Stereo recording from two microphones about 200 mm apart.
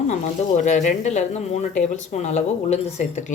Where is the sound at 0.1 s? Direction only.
35° left (ahead or behind).